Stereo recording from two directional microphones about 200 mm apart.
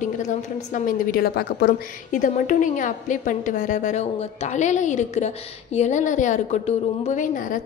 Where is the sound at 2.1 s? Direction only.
40° left (ahead or behind).